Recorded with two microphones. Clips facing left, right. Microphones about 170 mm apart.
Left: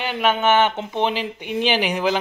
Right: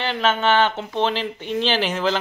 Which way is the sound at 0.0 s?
15° left (ahead or behind).